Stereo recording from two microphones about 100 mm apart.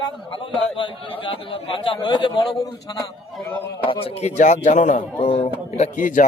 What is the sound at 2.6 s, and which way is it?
Speech, 35° left (ahead or behind).